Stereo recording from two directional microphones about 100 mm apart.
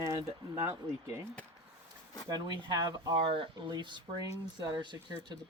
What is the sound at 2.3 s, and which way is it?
Speech, 45° right (ahead or behind).